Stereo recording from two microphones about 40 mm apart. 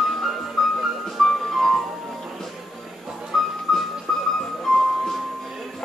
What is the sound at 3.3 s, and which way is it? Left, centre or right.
Music, centre.